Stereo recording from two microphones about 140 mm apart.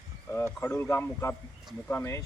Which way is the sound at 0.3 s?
15° left (ahead or behind).